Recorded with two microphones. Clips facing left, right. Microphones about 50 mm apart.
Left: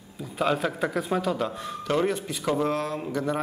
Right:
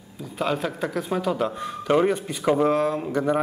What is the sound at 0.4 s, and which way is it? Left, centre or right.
A man's voice, centre.